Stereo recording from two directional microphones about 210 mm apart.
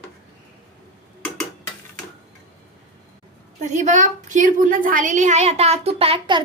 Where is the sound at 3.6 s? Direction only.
35° right (ahead or behind).